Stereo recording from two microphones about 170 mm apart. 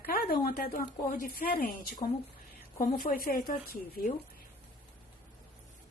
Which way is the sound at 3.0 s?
60° left (ahead or behind).